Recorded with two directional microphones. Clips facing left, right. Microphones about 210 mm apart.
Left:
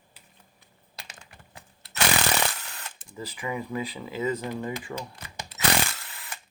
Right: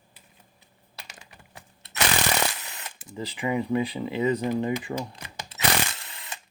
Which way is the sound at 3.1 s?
20° right (ahead or behind).